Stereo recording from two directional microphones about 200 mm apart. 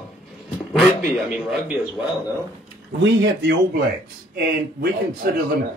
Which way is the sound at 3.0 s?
60° right (ahead or behind).